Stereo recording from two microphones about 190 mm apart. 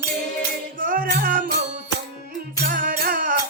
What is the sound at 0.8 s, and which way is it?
Music, 45° right (ahead or behind).